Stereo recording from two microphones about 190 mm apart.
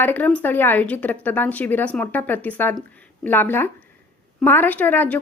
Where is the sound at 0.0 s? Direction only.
10° left (ahead or behind).